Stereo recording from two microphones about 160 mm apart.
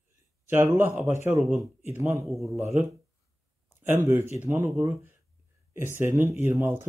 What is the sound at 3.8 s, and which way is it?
Speech, 15° right (ahead or behind).